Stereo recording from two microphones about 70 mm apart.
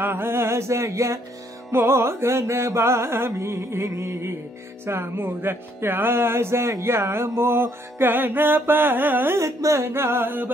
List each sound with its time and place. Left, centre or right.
0.0 s music: right